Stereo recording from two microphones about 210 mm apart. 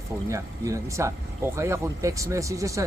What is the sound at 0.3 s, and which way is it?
Speech, 15° right (ahead or behind).